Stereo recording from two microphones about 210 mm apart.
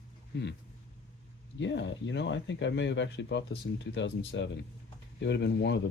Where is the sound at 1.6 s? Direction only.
60° left (ahead or behind).